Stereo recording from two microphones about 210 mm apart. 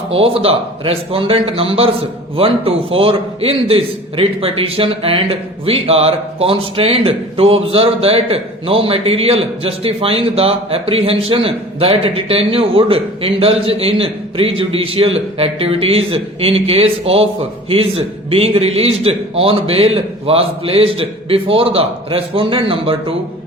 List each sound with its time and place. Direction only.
0.1 s a man's voice: 25° right (ahead or behind)